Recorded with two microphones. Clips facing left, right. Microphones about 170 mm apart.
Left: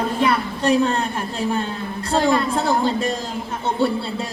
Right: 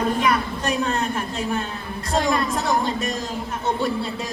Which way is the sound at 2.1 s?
30° left (ahead or behind).